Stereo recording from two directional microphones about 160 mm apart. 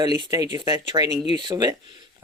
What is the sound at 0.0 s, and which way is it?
Speech, 25° right (ahead or behind).